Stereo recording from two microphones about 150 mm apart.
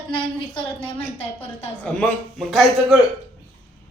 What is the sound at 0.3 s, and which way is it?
Speech, 35° left (ahead or behind).